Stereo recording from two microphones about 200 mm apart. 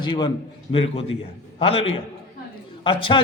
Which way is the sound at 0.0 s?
20° left (ahead or behind).